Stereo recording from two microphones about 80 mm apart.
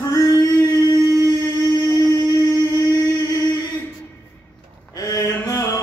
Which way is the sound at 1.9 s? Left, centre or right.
Left.